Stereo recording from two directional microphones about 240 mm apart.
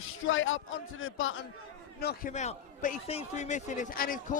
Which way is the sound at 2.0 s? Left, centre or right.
Left.